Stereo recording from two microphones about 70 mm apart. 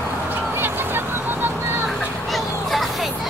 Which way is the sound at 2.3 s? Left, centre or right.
Centre.